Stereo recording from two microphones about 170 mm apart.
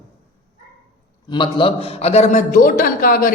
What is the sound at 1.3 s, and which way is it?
A man's voice, 30° left (ahead or behind).